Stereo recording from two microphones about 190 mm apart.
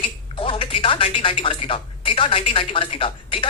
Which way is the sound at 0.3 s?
30° left (ahead or behind).